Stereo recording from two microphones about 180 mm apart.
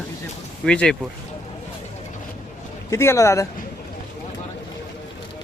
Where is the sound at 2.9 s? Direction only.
15° left (ahead or behind).